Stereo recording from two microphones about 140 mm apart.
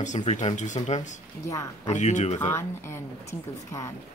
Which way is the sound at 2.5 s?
20° left (ahead or behind).